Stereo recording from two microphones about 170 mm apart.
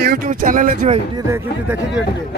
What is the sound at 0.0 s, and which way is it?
Speech, 60° right (ahead or behind).